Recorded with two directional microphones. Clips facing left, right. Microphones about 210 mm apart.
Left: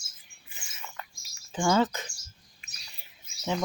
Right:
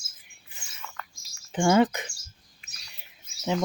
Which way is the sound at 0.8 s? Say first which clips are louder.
Right 1 dB; 20° left (ahead or behind).